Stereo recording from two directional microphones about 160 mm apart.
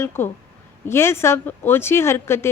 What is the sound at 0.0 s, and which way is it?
Speech, 15° left (ahead or behind).